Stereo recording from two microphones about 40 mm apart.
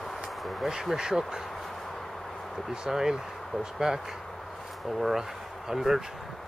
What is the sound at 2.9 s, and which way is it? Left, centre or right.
Speech, centre.